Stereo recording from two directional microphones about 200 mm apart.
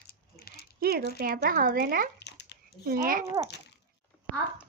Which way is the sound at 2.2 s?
60° left (ahead or behind).